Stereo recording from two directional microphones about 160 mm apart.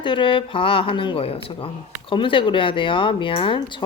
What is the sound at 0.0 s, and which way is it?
Speech, 30° left (ahead or behind).